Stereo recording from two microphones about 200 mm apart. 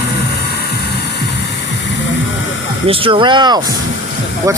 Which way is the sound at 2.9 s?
25° right (ahead or behind).